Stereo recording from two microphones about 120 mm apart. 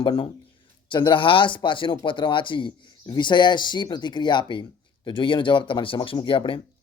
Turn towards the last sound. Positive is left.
turn(degrees=45)  # may be behind; listen again after turning